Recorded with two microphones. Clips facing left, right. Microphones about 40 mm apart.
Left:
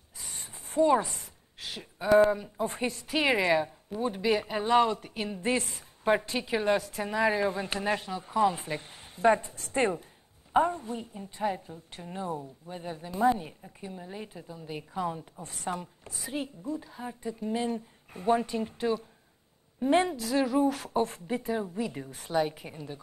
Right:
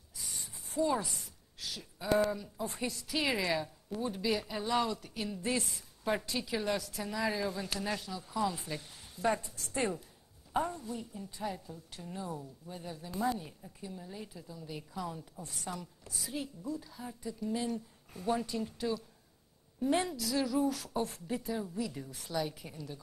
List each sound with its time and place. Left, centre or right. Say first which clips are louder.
0.2 s a woman's voice: left 2 dB; left